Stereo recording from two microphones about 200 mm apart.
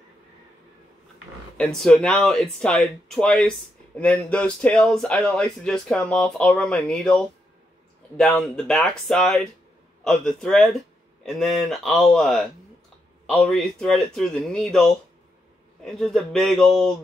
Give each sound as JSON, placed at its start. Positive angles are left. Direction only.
{"t": 1.6, "sound": "speech", "side_deg": 0}